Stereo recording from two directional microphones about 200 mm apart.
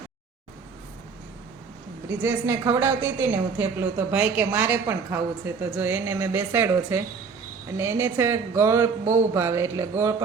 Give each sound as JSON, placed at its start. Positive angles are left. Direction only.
{"t": 2.0, "sound": "a woman's voice", "side_deg": -10}